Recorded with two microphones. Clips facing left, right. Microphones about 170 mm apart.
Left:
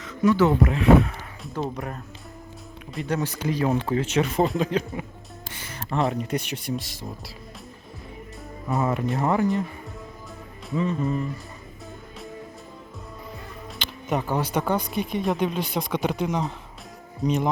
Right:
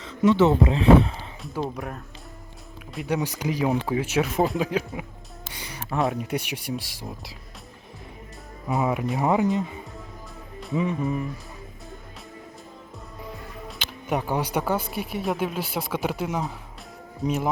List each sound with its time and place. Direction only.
0.0 s speech: 25° right (ahead or behind)
1.6 s speech: centre (ahead or behind)
3.2 s speech: 15° right (ahead or behind)
5.5 s music: 15° right (ahead or behind)
6.0 s speech: 5° right (ahead or behind)
8.6 s speech: 10° right (ahead or behind)
10.8 s speech: 10° right (ahead or behind)
13.7 s speech: 5° right (ahead or behind)